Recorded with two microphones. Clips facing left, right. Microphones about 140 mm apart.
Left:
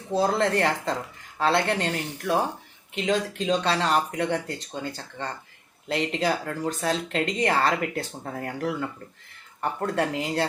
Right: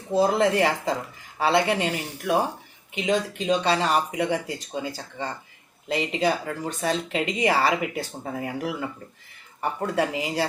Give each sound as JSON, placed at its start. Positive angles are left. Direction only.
{"t": 0.1, "sound": "speech", "side_deg": -5}